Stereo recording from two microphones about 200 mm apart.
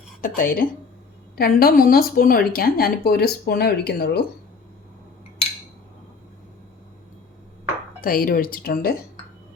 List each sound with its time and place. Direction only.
0.2 s a woman's voice: 45° left (ahead or behind)
8.0 s a woman's voice: 45° left (ahead or behind)